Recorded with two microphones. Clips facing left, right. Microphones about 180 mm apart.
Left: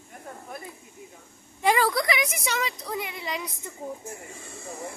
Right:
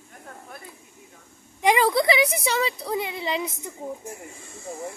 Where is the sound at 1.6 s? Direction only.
20° right (ahead or behind).